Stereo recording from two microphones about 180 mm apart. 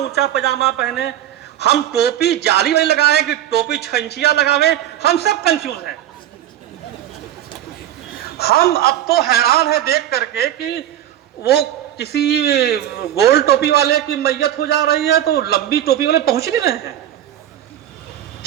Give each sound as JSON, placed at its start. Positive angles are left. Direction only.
{"t": 0.0, "sound": "a man's voice", "side_deg": 65}
{"t": 8.4, "sound": "a man's voice", "side_deg": 60}